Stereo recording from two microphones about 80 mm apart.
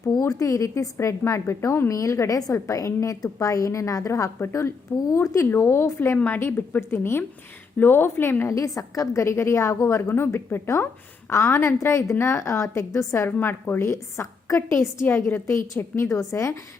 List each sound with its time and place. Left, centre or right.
0.1 s a woman's voice: left
8.5 s a woman's voice: left